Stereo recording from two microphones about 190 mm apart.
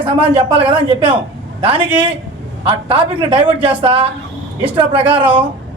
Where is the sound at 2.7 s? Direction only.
30° right (ahead or behind).